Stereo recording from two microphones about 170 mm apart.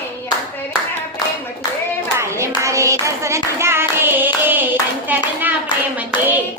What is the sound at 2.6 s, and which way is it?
Clapping, 15° right (ahead or behind).